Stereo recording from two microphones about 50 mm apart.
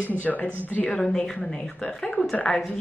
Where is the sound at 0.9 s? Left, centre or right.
Centre.